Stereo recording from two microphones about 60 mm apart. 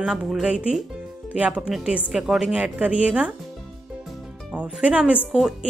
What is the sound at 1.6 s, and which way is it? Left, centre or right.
Speech, centre.